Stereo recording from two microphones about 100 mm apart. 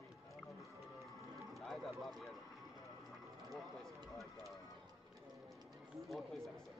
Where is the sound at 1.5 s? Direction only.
Centre (ahead or behind).